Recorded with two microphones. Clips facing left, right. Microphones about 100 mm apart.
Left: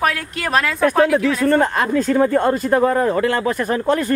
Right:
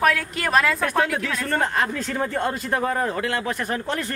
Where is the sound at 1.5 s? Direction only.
45° left (ahead or behind).